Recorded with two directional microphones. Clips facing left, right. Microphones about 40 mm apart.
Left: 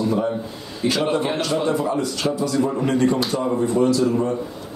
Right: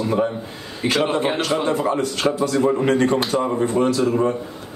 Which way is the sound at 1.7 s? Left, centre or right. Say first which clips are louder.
Right 1 dB; right.